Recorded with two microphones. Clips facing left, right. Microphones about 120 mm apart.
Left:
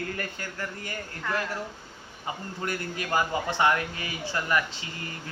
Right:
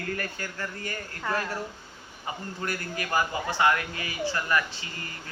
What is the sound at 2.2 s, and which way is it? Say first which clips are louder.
A man's voice: left 1 dB; 20° left (ahead or behind).